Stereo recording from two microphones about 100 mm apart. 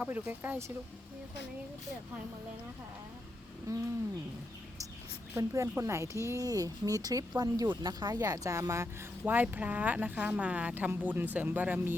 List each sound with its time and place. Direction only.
0.0 s speech: 20° right (ahead or behind)
3.7 s speech: 35° right (ahead or behind)
5.3 s speech: 30° right (ahead or behind)